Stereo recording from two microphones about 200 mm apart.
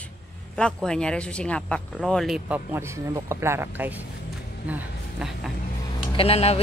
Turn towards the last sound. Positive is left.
turn(degrees=30)  # may be behind; listen again after turning